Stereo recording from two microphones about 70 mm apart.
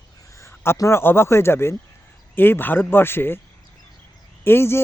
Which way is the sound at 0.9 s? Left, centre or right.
Left.